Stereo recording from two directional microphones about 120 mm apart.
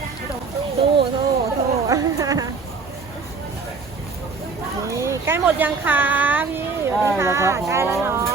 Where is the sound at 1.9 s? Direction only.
30° right (ahead or behind).